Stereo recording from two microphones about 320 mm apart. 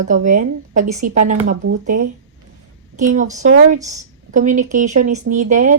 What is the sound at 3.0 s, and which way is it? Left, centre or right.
Speech, right.